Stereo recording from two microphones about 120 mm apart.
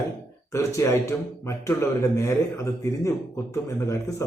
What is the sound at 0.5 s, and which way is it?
A man's voice, 25° left (ahead or behind).